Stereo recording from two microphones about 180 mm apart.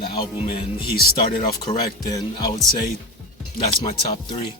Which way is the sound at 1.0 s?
55° left (ahead or behind).